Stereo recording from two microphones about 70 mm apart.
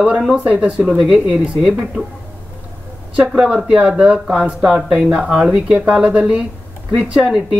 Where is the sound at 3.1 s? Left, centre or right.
Centre.